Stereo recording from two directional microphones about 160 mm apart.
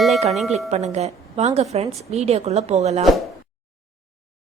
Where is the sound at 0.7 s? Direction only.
45° right (ahead or behind).